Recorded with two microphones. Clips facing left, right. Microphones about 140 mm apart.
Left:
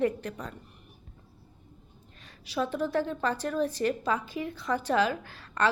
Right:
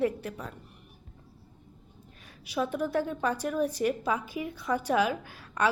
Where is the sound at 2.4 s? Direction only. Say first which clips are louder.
Even; 10° right (ahead or behind).